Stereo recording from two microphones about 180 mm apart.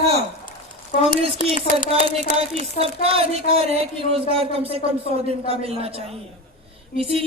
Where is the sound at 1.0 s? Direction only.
35° right (ahead or behind).